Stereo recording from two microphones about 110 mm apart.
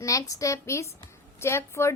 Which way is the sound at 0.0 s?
30° left (ahead or behind).